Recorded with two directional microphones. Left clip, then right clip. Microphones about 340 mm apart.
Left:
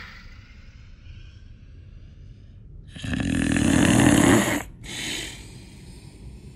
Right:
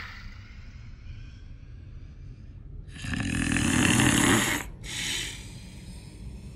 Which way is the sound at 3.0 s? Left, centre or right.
Left.